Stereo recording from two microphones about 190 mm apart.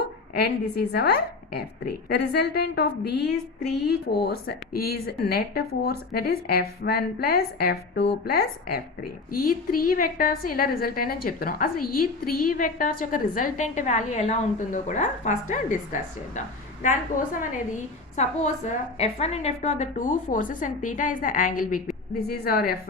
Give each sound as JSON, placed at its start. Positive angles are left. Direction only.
{"t": 0.3, "sound": "a woman's voice", "side_deg": 60}
{"t": 17.7, "sound": "a woman's voice", "side_deg": 35}